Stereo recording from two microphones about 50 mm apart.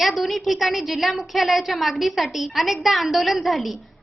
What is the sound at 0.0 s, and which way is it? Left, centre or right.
A woman's voice, centre.